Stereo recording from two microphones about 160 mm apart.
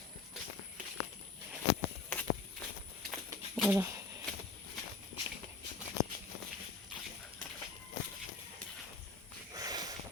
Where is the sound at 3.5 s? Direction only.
5° right (ahead or behind).